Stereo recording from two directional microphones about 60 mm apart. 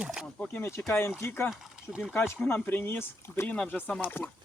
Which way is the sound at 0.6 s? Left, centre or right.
Left.